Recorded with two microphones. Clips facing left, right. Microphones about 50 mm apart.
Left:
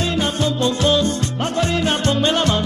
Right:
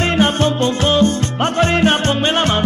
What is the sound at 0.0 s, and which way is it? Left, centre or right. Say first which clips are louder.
Music: right 5 dB; right.